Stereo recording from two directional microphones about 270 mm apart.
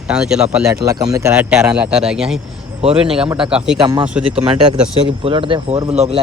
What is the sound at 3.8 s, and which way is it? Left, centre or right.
Speech, centre.